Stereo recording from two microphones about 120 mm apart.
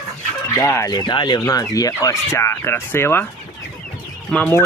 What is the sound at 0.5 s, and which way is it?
Speech, 25° left (ahead or behind).